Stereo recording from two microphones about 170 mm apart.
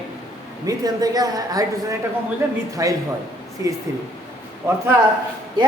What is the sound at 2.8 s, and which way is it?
Speech, 20° right (ahead or behind).